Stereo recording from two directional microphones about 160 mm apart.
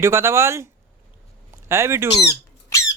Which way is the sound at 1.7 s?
15° right (ahead or behind).